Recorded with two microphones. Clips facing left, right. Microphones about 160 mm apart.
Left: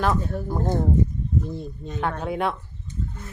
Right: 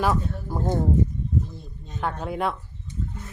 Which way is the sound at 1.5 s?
70° left (ahead or behind).